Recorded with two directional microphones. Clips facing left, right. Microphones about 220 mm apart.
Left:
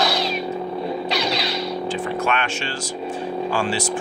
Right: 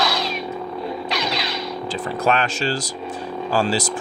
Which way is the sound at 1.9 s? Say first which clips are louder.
Right 4 dB; 35° right (ahead or behind).